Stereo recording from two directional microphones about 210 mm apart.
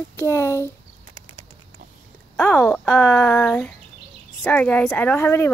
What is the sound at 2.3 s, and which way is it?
Speech, 10° left (ahead or behind).